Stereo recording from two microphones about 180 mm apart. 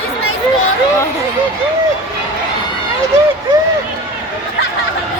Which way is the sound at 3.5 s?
20° right (ahead or behind).